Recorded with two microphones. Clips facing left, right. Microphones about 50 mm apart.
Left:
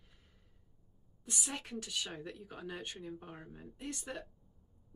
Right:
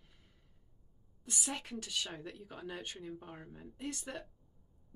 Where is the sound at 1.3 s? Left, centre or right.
Centre.